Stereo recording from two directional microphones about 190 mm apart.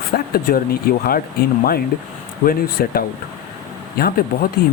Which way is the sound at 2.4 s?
50° left (ahead or behind).